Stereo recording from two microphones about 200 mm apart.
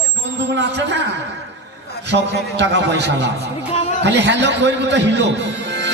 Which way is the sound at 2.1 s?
60° right (ahead or behind).